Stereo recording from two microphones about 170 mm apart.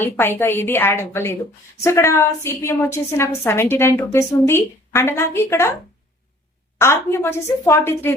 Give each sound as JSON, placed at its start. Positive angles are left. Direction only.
{"t": 0.0, "sound": "a woman's voice", "side_deg": 15}
{"t": 6.7, "sound": "a woman's voice", "side_deg": 15}